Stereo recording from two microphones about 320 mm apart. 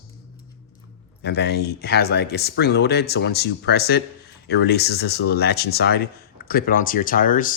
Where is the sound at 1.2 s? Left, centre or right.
Left.